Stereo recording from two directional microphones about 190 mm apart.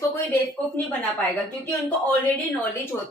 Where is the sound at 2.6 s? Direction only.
10° left (ahead or behind).